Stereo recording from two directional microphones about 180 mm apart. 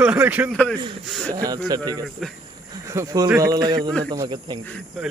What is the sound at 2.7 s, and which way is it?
A man's voice, 15° right (ahead or behind).